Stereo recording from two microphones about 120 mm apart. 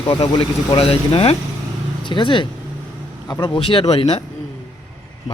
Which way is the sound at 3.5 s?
45° left (ahead or behind).